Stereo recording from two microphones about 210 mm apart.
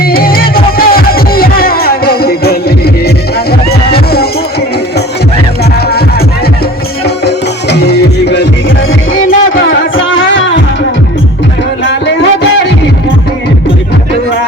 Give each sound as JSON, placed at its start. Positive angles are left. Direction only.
{"t": 0.0, "sound": "music", "side_deg": 45}
{"t": 7.3, "sound": "music", "side_deg": 50}
{"t": 9.2, "sound": "a sound", "side_deg": 70}